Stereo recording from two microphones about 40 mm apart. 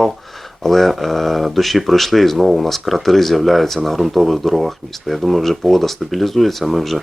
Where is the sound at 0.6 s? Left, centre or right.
Centre.